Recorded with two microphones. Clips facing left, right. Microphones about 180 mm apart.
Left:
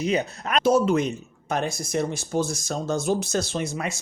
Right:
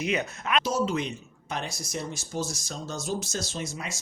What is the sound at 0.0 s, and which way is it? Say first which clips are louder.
Speech: left 4 dB; 35° left (ahead or behind).